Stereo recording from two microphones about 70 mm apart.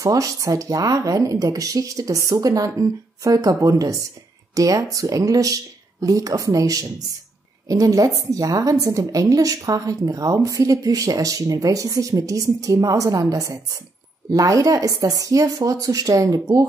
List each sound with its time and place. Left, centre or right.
0.0 s a woman's voice: right